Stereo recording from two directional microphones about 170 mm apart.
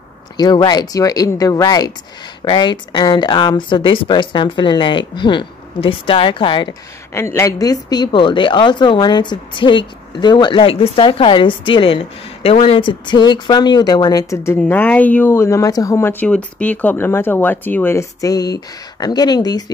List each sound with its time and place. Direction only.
0.4 s a woman's voice: 25° left (ahead or behind)
7.2 s a woman's voice: 15° left (ahead or behind)